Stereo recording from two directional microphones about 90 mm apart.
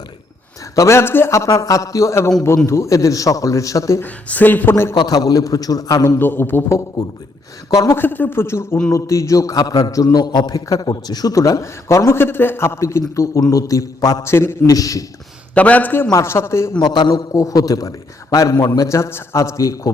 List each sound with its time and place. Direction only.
0.8 s a man's voice: 30° left (ahead or behind)
4.0 s speech: 20° left (ahead or behind)
4.9 s a man's voice: 45° left (ahead or behind); by 6.7 s 25° left (ahead or behind)
7.0 s a man's voice: 45° left (ahead or behind)
7.9 s a man's voice: 20° left (ahead or behind); by 14.3 s 40° left (ahead or behind)
14.3 s speech: 30° left (ahead or behind)
14.7 s a man's voice: 40° left (ahead or behind)
15.5 s a man's voice: 15° left (ahead or behind)
16.0 s a man's voice: 30° left (ahead or behind)
16.8 s a man's voice: 50° left (ahead or behind)
17.3 s a man's voice: 40° left (ahead or behind)